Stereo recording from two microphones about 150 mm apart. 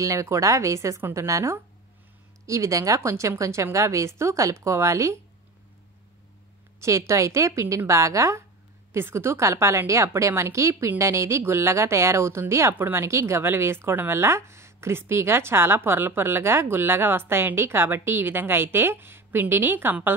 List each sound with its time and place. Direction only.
0.0 s a woman's voice: 20° right (ahead or behind)
6.8 s a woman's voice: 20° right (ahead or behind)